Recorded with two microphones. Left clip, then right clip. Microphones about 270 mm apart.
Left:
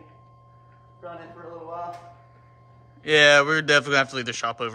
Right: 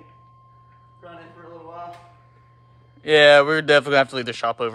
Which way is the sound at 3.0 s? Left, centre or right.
Centre.